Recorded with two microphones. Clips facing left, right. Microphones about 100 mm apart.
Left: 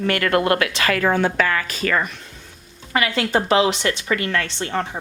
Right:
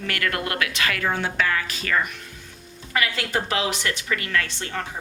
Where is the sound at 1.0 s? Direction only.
60° left (ahead or behind).